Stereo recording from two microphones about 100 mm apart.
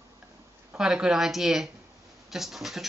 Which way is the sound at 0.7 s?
5° right (ahead or behind).